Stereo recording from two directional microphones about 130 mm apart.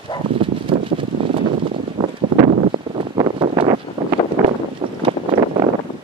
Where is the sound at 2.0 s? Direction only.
50° right (ahead or behind).